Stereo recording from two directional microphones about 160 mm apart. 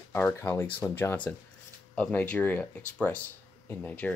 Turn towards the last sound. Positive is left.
turn(degrees=10)  # may be behind; listen again after turning